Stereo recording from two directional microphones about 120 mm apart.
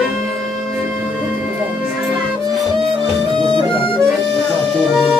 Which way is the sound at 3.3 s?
45° right (ahead or behind).